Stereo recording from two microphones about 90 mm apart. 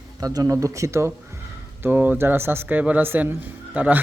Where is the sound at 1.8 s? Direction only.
20° right (ahead or behind).